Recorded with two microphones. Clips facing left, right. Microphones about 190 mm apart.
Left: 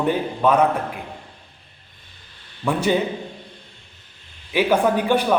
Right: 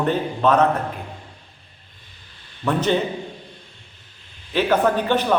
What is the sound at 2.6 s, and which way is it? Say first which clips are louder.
Speech: even; 10° left (ahead or behind).